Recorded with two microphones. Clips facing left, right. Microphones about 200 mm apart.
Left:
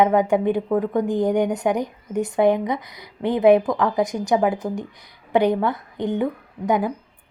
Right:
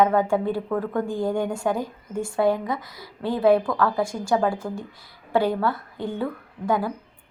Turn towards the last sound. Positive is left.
turn(degrees=20)  # may be behind; listen again after turning